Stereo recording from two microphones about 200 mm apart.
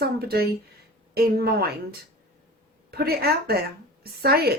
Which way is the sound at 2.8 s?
50° right (ahead or behind).